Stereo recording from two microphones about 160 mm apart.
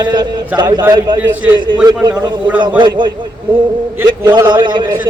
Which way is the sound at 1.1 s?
10° right (ahead or behind).